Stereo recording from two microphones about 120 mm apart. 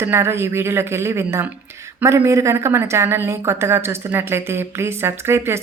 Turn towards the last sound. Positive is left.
turn(degrees=-20)  # may be behind; listen again after turning